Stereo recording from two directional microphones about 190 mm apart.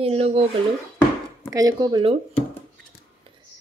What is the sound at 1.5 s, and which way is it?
Speech, 20° right (ahead or behind).